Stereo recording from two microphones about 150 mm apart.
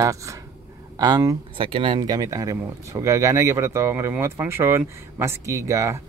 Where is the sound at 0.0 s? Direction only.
20° right (ahead or behind).